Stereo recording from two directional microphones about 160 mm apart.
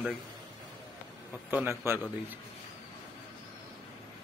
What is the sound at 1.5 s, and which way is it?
Speech, 15° right (ahead or behind).